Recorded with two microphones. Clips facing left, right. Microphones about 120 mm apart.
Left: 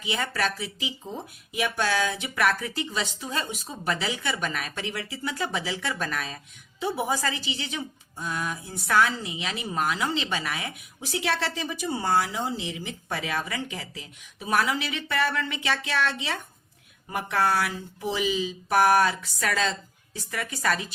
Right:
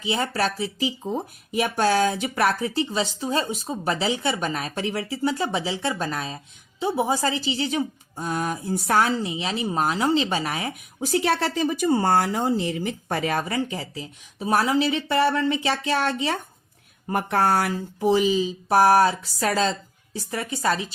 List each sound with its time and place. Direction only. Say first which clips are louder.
0.0 s speech: right 4 dB; 30° right (ahead or behind)